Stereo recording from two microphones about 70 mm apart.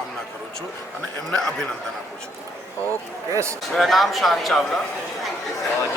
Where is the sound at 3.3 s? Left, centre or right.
Right.